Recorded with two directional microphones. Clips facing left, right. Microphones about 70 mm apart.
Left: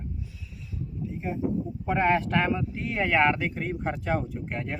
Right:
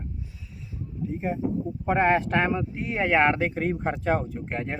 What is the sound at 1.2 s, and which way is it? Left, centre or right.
Speech, right.